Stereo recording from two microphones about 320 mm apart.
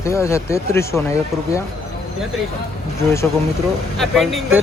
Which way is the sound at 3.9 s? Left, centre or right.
Centre.